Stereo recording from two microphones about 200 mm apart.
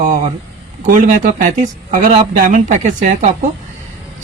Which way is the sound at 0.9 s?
40° right (ahead or behind).